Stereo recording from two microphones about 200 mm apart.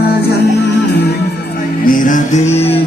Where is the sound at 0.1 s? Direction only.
55° left (ahead or behind).